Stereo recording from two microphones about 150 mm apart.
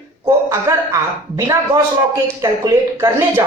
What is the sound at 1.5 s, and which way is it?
A man's voice, 20° right (ahead or behind).